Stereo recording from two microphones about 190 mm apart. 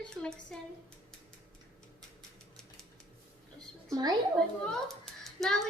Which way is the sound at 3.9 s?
20° right (ahead or behind).